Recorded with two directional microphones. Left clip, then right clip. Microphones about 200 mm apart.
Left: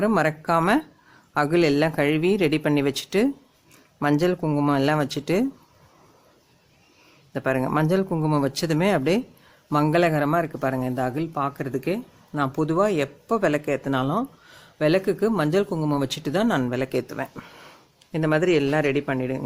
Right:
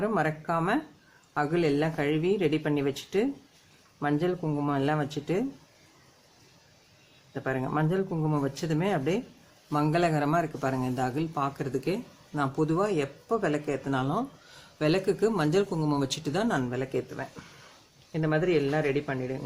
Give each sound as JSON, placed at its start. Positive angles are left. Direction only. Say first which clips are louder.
{"t": 0.0, "sound": "speech", "louder": "left 6 dB", "side_deg": 45}
{"t": 7.3, "sound": "speech", "louder": "left 7 dB", "side_deg": 45}